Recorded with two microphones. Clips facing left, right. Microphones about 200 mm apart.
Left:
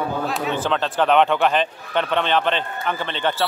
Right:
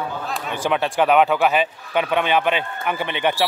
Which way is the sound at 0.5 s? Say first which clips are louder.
Right 4 dB; 10° right (ahead or behind).